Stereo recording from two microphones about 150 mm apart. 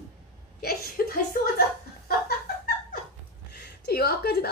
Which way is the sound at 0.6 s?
90° left.